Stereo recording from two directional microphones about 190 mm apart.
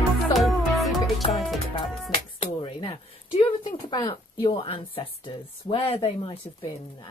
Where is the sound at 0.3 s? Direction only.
Centre (ahead or behind).